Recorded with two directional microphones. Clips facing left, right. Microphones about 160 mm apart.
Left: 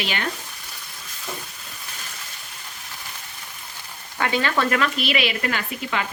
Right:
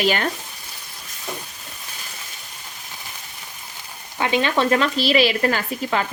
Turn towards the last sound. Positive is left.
turn(degrees=-35)  # may be behind; listen again after turning